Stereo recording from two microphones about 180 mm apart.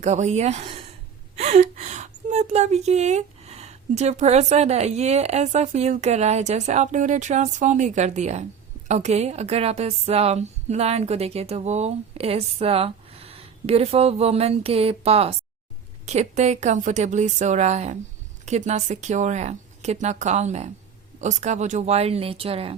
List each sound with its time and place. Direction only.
0.0 s a woman's voice: 40° right (ahead or behind)